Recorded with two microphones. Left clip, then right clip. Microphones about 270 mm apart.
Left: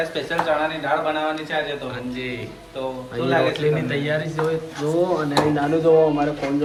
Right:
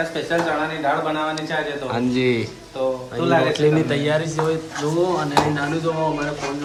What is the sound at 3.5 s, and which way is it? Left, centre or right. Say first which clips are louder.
Speech: right 3 dB; centre.